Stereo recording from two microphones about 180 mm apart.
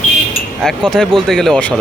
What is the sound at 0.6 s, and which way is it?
Speech, 5° left (ahead or behind).